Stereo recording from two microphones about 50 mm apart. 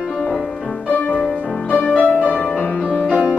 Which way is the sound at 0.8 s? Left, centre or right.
Left.